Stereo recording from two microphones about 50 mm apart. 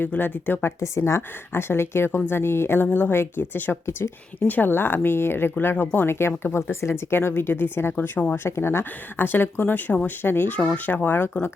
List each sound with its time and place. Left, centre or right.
0.0 s speech: left
0.6 s a woman's voice: left
1.6 s speech: left
3.8 s a woman's voice: left
4.4 s speech: left
4.7 s speech: left
8.4 s speech: left
8.8 s speech: left